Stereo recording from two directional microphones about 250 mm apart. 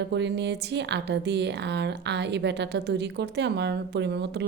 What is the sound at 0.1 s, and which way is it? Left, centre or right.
A woman's voice, right.